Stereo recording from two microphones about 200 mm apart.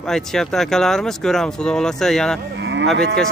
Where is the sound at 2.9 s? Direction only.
55° right (ahead or behind).